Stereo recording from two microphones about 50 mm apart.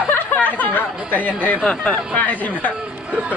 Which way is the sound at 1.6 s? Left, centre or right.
Centre.